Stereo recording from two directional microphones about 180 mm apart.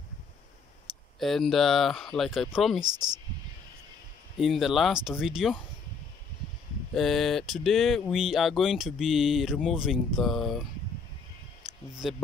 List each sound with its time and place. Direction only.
1.2 s speech: centre (ahead or behind)
2.8 s speech: 25° right (ahead or behind)
4.4 s speech: centre (ahead or behind)
6.9 s speech: centre (ahead or behind)
12.0 s speech: centre (ahead or behind)